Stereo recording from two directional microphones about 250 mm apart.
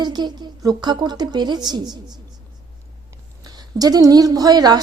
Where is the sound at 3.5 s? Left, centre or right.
Centre.